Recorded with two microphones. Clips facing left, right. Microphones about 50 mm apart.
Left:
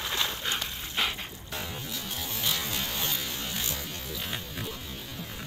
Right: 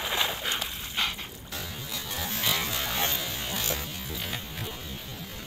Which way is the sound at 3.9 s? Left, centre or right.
Centre.